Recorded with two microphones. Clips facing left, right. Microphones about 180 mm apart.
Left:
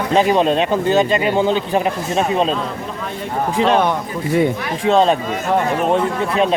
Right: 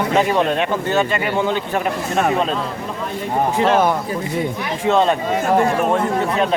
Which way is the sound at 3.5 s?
20° left (ahead or behind).